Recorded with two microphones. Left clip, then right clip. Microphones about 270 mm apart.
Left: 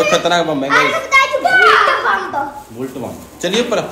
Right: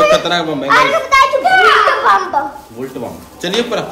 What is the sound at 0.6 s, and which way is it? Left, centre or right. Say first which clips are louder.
Speech: right 3 dB; centre.